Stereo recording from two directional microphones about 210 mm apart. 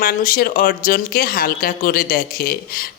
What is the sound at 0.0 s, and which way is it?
Speech, 45° left (ahead or behind).